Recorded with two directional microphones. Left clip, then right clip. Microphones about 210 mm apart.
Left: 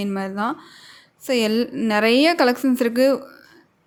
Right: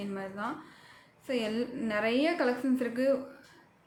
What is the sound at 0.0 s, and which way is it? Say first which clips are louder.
Speech: left 12 dB; 50° left (ahead or behind).